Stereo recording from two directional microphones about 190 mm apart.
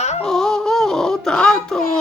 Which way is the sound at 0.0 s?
35° left (ahead or behind).